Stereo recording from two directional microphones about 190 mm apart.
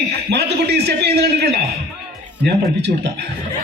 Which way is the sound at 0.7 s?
60° right (ahead or behind).